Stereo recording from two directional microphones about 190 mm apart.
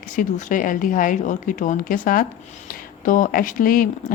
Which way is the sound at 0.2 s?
45° left (ahead or behind).